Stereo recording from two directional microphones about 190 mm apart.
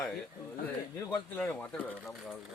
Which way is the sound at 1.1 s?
5° left (ahead or behind).